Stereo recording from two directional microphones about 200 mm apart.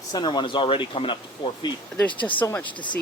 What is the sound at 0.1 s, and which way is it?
Speech, 20° left (ahead or behind).